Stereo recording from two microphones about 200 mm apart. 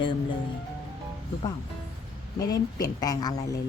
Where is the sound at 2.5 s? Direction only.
20° left (ahead or behind).